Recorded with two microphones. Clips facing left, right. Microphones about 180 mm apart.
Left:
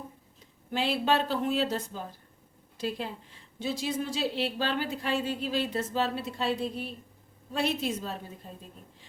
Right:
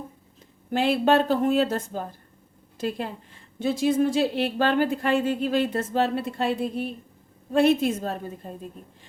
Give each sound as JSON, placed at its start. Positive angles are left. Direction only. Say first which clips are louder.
{"t": 0.7, "sound": "a woman's voice", "louder": "right 7 dB", "side_deg": -50}